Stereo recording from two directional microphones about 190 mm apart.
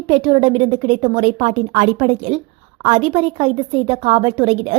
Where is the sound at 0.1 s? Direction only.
30° right (ahead or behind).